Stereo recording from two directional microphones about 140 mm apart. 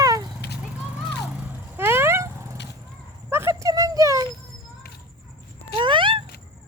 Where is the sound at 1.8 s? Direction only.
15° right (ahead or behind).